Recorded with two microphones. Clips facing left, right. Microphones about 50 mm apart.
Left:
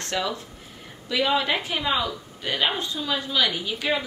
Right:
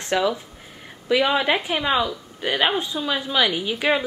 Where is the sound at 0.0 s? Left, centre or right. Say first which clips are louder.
Right 6 dB; centre.